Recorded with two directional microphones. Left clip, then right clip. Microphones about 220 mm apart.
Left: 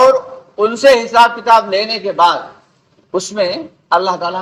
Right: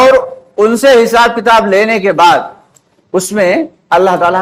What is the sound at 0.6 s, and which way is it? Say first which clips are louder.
Speech: right 4 dB; 50° right (ahead or behind).